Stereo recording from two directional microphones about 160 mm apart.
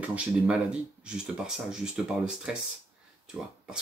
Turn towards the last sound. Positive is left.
turn(degrees=-5)  # may be behind; listen again after turning